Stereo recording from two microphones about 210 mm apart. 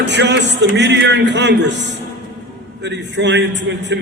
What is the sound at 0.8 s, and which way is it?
A man's voice, 55° right (ahead or behind).